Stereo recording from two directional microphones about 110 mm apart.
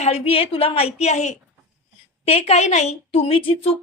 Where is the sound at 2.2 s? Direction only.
65° left (ahead or behind).